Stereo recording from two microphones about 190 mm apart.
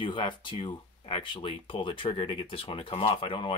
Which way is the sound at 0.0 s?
25° left (ahead or behind).